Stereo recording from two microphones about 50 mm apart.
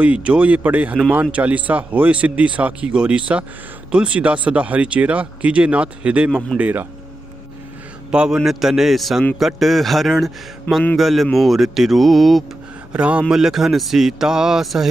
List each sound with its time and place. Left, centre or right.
0.0 s speech: right
6.6 s speech: right
8.1 s a man's voice: centre
8.5 s a man's voice: centre
12.9 s speech: right
13.3 s a man's voice: centre